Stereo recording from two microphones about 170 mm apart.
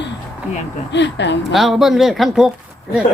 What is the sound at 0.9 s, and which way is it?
Speech, 90° left.